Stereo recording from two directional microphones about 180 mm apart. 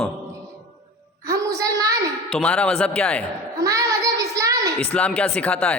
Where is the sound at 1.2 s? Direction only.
15° right (ahead or behind).